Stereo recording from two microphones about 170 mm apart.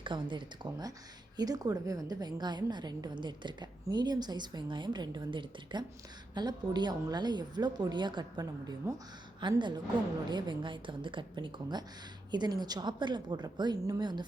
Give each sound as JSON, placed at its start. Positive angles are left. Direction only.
{"t": 0.0, "sound": "a woman's voice", "side_deg": -30}